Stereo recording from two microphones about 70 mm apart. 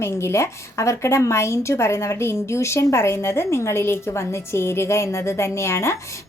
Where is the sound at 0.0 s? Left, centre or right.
Left.